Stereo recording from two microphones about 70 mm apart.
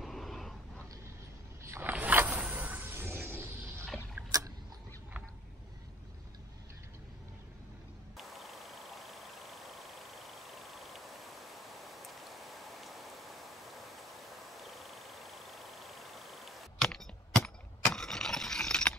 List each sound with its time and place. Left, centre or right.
0.0 s dog: centre
1.8 s a sound: right
2.4 s music: right
4.2 s rowboat: right
8.2 s vehicle: centre
13.9 s a sound: centre